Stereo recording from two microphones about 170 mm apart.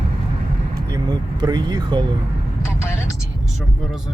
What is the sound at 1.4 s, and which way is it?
Speech, 25° right (ahead or behind).